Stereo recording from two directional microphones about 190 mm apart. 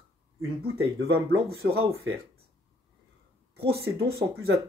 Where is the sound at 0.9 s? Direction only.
75° right (ahead or behind).